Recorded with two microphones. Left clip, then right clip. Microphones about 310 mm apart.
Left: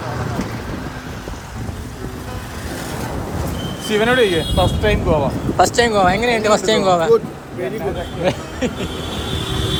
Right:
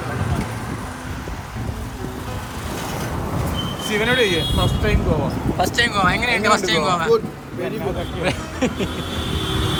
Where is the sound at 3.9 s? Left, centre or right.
Left.